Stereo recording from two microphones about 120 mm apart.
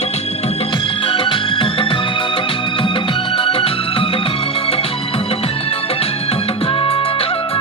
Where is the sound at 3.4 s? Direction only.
50° left (ahead or behind).